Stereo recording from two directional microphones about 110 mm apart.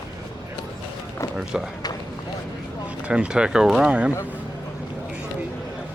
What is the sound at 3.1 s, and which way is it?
Speech, 10° right (ahead or behind).